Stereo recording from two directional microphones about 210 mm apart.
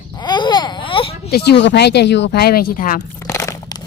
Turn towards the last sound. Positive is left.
turn(degrees=15)  # may be behind; listen again after turning